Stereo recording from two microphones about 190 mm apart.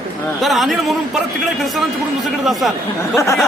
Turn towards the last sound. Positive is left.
turn(degrees=15)  # may be behind; listen again after turning